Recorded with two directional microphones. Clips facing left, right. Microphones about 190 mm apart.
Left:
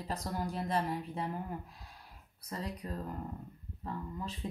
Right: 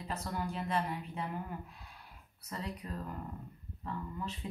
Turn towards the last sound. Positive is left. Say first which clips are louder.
# even
turn(degrees=35)  # may be behind; listen again after turning